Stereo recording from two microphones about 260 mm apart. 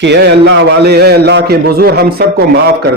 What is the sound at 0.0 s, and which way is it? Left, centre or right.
A man's voice, right.